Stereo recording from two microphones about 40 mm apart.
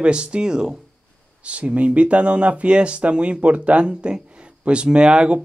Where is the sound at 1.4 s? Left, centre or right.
Right.